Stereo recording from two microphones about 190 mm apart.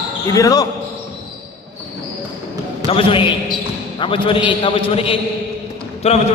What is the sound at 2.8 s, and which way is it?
A man's voice, 30° left (ahead or behind).